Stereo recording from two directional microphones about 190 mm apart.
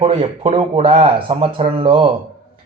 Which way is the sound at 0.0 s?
30° right (ahead or behind).